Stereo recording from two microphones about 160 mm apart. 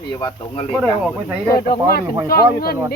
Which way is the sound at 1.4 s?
65° left (ahead or behind).